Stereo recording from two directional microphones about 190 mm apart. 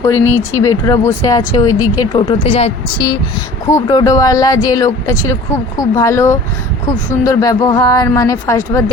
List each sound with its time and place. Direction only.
0.3 s speech: 10° right (ahead or behind)
0.6 s speech: 15° left (ahead or behind); by 3.1 s 30° left (ahead or behind)
3.7 s a woman's voice: 15° left (ahead or behind)